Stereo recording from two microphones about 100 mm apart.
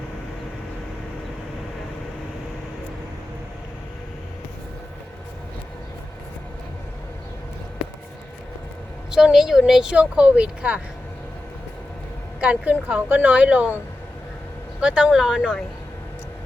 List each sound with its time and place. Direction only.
9.1 s speech: 5° right (ahead or behind)
12.4 s speech: 15° right (ahead or behind)
14.8 s speech: 10° right (ahead or behind)